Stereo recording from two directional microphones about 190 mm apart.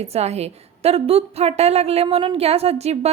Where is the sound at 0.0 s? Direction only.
35° right (ahead or behind).